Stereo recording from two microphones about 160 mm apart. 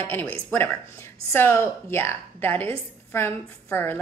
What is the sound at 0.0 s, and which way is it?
A woman's voice, 10° left (ahead or behind).